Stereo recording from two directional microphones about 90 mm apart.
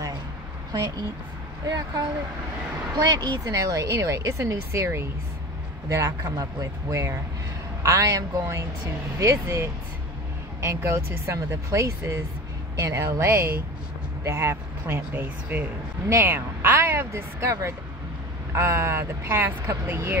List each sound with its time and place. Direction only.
1.7 s speech: 45° right (ahead or behind); by 20.2 s 25° right (ahead or behind)